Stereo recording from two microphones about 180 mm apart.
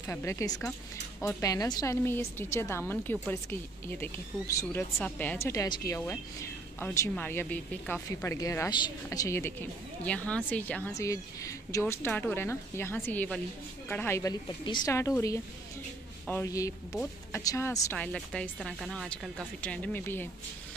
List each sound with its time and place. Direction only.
0.0 s speech: 15° left (ahead or behind)
10.0 s speech: 5° left (ahead or behind)
10.9 s speech: 20° left (ahead or behind)